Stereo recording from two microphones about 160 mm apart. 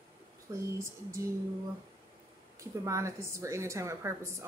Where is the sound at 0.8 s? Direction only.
15° right (ahead or behind).